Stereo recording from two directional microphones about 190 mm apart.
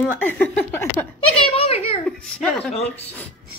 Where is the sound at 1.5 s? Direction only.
30° left (ahead or behind).